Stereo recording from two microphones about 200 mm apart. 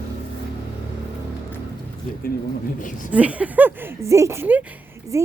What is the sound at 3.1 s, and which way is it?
Speech, 5° right (ahead or behind).